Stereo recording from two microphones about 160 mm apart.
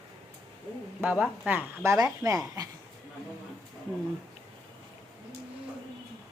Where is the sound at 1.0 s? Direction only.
10° right (ahead or behind).